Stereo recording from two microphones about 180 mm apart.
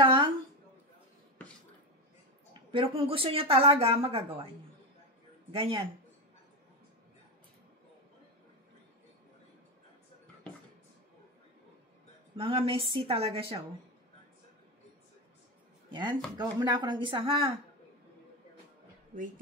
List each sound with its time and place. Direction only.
0.0 s a sound: 30° right (ahead or behind)
2.7 s a woman's voice: 30° right (ahead or behind)
5.5 s a woman's voice: 30° right (ahead or behind)
12.4 s a woman's voice: 30° right (ahead or behind)
15.9 s speech: 25° right (ahead or behind)